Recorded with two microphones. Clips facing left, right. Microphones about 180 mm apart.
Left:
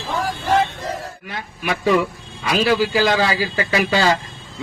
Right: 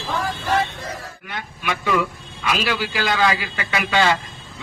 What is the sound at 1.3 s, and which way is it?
Speech, 35° left (ahead or behind).